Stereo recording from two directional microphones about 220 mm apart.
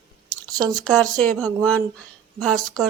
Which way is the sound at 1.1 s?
5° left (ahead or behind).